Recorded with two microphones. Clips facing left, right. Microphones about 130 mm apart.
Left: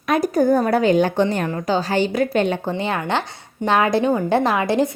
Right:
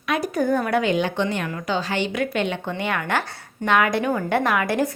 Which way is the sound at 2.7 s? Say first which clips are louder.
Left 2 dB; 30° left (ahead or behind).